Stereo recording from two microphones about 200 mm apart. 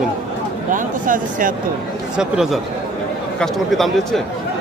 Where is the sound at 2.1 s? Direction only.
5° right (ahead or behind).